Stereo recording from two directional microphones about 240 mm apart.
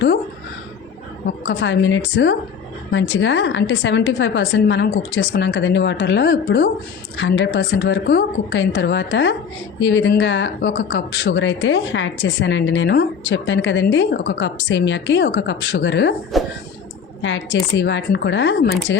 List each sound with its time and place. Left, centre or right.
1.5 s speech: left
16.3 s speech: centre
17.2 s speech: left